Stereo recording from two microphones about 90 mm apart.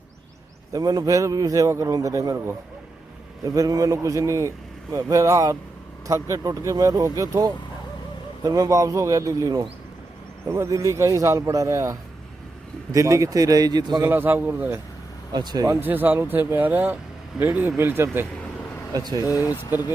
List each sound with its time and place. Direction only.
0.7 s a man's voice: 45° right (ahead or behind)
3.4 s a man's voice: 40° right (ahead or behind)
10.7 s a man's voice: 35° right (ahead or behind)
14.1 s speech: 20° right (ahead or behind)
15.3 s speech: 50° right (ahead or behind)
15.7 s speech: 20° right (ahead or behind)
18.9 s speech: 45° right (ahead or behind)
19.2 s speech: 40° left (ahead or behind)